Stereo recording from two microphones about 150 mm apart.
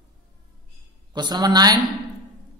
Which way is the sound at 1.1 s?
30° right (ahead or behind).